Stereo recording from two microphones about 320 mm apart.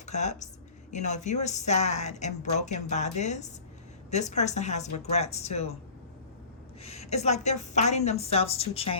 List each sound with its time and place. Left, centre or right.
0.0 s a woman's voice: left
6.8 s a woman's voice: centre